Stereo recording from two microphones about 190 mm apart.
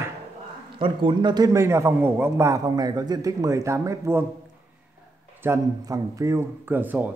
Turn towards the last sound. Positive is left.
turn(degrees=-10)  # may be behind; listen again after turning